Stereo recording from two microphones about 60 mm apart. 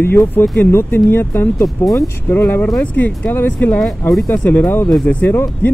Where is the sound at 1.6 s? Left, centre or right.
Left.